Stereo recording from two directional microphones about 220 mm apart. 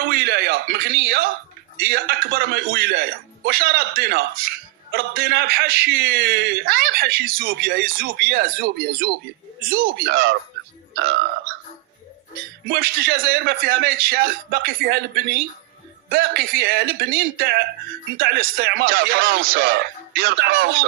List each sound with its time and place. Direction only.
0.0 s speech: 45° right (ahead or behind)
9.6 s speech: 45° right (ahead or behind)
12.6 s speech: 45° right (ahead or behind)